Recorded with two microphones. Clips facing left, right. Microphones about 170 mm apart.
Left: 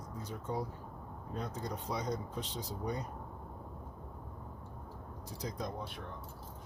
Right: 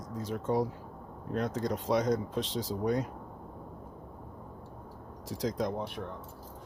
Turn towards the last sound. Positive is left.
turn(degrees=-90)